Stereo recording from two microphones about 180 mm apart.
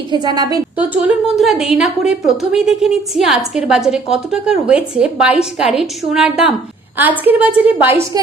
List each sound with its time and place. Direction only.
0.1 s a woman's voice: 25° right (ahead or behind)
0.8 s a woman's voice: 5° right (ahead or behind)